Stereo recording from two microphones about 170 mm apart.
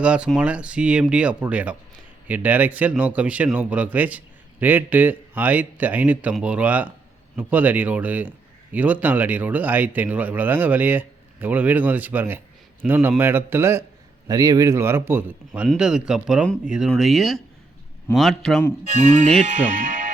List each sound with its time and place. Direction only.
0.0 s speech: 5° right (ahead or behind)
18.9 s speech: 45° right (ahead or behind)